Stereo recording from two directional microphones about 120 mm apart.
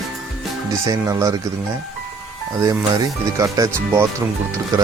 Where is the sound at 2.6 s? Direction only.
30° right (ahead or behind).